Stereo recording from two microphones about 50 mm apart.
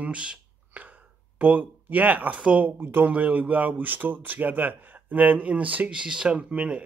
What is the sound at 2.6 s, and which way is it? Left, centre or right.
Speech, right.